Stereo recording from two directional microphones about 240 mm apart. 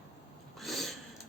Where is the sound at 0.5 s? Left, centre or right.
Centre.